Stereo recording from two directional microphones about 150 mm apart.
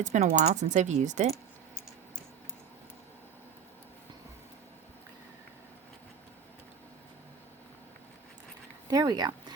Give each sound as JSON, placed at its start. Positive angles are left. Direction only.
{"t": 0.0, "sound": "speech", "side_deg": -50}
{"t": 8.9, "sound": "speech", "side_deg": -25}